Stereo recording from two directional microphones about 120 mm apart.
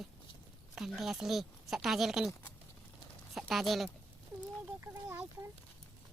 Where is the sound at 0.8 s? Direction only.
Centre (ahead or behind).